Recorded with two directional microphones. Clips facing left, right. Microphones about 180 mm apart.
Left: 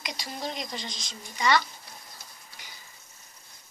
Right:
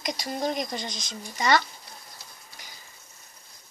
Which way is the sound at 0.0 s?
45° right (ahead or behind).